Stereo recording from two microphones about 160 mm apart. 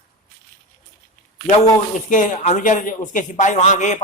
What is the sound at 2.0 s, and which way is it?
Speech, 55° left (ahead or behind).